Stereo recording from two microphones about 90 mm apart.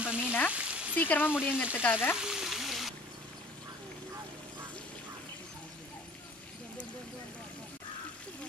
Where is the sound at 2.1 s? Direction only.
5° right (ahead or behind).